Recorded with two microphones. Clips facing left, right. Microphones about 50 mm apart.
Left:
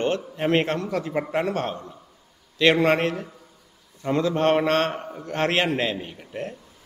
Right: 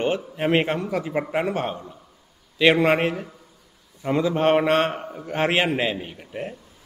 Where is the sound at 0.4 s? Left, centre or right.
Centre.